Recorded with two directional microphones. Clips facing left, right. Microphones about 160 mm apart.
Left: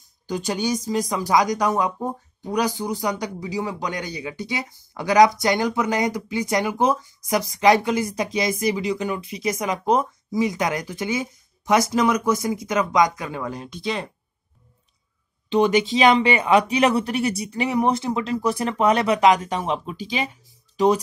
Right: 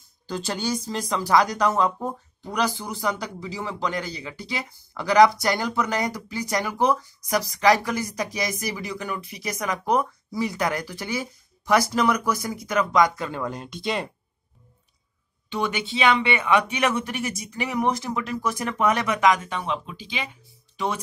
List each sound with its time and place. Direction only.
0.3 s speech: 15° left (ahead or behind)
13.3 s speech: 5° left (ahead or behind)
15.6 s speech: 35° left (ahead or behind)